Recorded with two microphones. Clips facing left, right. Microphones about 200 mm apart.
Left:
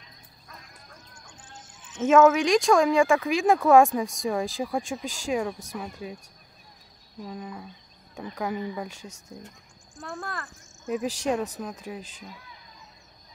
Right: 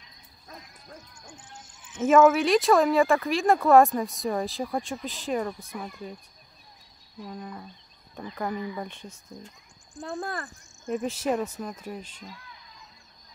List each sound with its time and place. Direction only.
1.3 s a sound: 10° right (ahead or behind)
2.0 s speech: 10° right (ahead or behind)
7.2 s speech: centre (ahead or behind)
9.0 s speech: 75° left (ahead or behind)
9.9 s speech: 15° right (ahead or behind)
10.9 s speech: centre (ahead or behind)